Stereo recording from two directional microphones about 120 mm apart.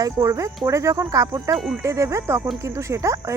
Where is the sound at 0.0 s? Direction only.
30° right (ahead or behind).